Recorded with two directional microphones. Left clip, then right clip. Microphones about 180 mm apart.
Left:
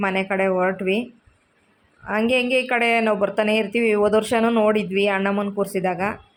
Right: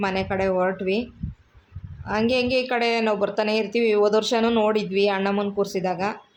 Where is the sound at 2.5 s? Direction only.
15° left (ahead or behind).